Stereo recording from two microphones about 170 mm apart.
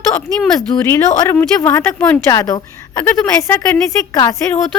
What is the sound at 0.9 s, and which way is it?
A woman's voice, 15° left (ahead or behind).